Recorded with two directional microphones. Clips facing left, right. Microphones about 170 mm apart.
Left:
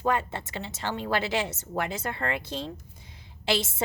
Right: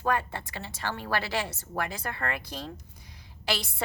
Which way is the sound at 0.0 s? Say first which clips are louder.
Left 2 dB; 20° left (ahead or behind).